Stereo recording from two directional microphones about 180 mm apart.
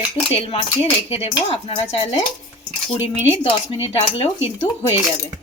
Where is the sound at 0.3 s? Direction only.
30° left (ahead or behind).